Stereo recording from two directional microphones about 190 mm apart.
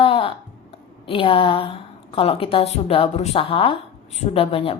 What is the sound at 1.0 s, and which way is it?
A woman's voice, 30° left (ahead or behind).